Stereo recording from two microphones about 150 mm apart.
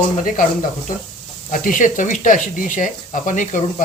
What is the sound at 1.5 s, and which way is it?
Speech, 60° left (ahead or behind).